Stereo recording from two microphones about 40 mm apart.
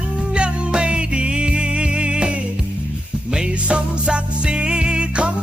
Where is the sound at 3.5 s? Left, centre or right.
Right.